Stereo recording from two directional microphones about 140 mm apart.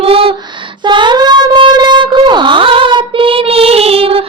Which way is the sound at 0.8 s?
35° right (ahead or behind).